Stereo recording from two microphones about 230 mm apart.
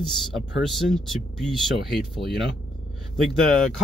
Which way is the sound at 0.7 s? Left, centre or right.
Centre.